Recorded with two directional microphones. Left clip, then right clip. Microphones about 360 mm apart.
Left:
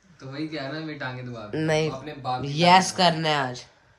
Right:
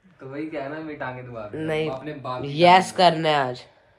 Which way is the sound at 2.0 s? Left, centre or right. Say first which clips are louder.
Left 1 dB; centre.